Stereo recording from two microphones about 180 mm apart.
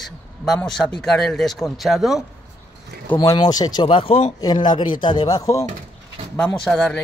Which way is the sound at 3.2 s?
25° left (ahead or behind).